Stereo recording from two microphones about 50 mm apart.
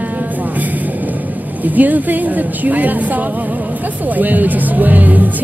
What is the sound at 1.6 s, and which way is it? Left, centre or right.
Music, right.